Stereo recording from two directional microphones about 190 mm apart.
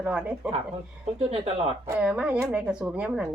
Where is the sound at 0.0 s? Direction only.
5° right (ahead or behind).